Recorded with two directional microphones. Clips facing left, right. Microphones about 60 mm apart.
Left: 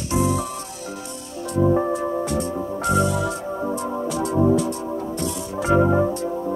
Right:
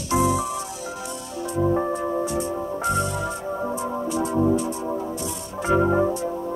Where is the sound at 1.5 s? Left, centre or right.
Centre.